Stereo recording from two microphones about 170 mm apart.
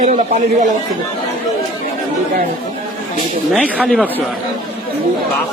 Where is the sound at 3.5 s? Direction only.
5° right (ahead or behind).